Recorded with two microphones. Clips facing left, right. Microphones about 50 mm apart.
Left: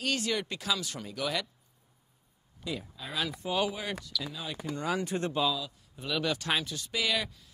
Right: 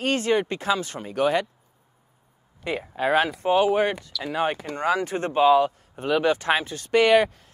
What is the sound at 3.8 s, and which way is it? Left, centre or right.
Speech, right.